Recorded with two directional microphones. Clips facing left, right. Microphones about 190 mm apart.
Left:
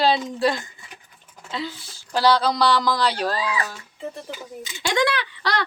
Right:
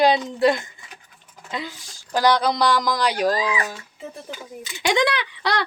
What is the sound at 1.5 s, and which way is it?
A woman's voice, 15° right (ahead or behind).